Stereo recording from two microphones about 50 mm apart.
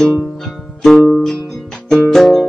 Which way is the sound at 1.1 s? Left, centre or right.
Centre.